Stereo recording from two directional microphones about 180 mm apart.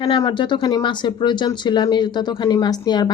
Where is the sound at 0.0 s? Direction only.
25° left (ahead or behind).